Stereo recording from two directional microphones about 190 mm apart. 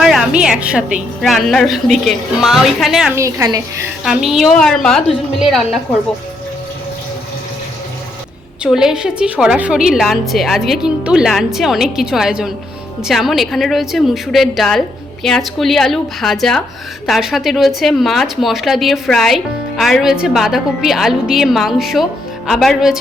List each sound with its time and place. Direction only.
0.0 s a woman's voice: centre (ahead or behind)
3.2 s a woman's voice: 15° right (ahead or behind)
4.0 s a woman's voice: centre (ahead or behind)
8.6 s a woman's voice: 5° right (ahead or behind)